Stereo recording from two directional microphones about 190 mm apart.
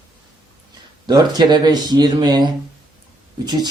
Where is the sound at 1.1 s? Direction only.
20° right (ahead or behind).